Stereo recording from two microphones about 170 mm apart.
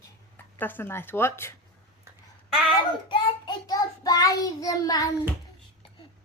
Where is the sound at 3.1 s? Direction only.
25° left (ahead or behind).